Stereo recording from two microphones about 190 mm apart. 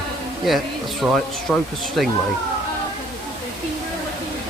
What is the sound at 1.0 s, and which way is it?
Speech, 5° right (ahead or behind).